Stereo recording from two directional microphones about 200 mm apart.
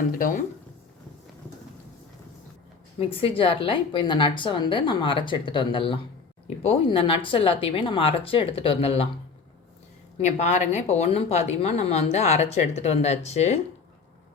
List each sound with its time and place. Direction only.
0.1 s speech: 45° left (ahead or behind)
3.0 s a woman's voice: 30° left (ahead or behind)
10.2 s speech: 35° left (ahead or behind)